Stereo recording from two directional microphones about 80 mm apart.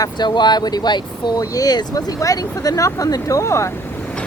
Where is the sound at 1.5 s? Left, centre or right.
Left.